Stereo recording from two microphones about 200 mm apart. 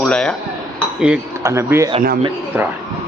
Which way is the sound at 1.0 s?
10° right (ahead or behind).